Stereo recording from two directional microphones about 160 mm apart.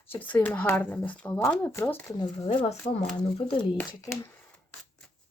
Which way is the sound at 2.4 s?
40° left (ahead or behind).